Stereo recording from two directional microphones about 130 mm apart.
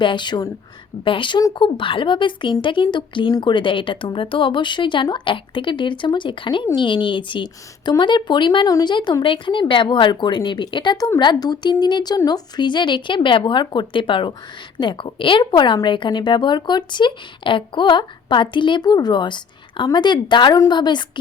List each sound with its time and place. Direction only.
0.0 s a woman's voice: 40° left (ahead or behind)